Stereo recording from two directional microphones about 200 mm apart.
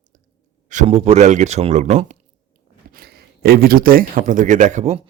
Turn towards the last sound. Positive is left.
turn(degrees=-35)  # may be behind; listen again after turning